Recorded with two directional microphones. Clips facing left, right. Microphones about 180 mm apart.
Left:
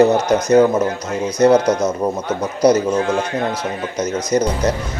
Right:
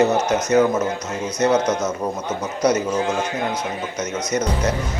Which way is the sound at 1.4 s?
35° left (ahead or behind).